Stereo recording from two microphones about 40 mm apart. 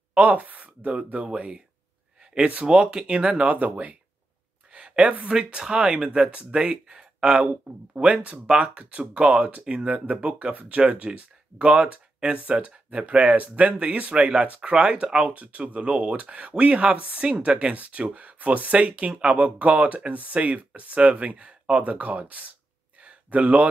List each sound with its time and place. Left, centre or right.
0.1 s speech: right
0.9 s speech: right
2.6 s speech: centre
3.1 s speech: right
4.7 s a sound: right
5.3 s speech: right
14.1 s speech: right
22.9 s a sound: right